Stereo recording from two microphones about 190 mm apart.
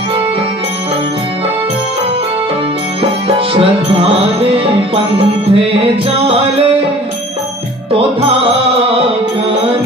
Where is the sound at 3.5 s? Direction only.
30° right (ahead or behind).